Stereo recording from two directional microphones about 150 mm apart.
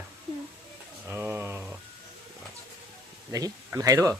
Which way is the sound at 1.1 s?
15° right (ahead or behind).